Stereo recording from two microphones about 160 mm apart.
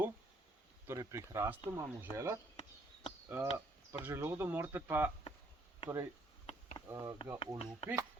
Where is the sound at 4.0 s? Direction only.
15° right (ahead or behind).